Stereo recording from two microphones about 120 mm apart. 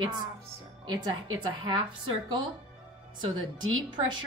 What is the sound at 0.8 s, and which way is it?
A woman's voice, 35° right (ahead or behind).